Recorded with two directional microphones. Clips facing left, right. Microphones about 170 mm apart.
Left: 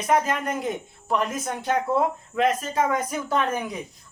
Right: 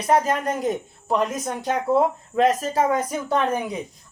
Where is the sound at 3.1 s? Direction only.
20° right (ahead or behind).